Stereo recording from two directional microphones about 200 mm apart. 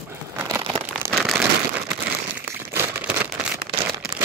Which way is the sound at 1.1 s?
Centre (ahead or behind).